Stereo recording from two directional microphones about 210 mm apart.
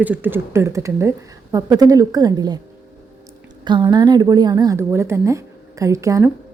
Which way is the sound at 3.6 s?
20° right (ahead or behind).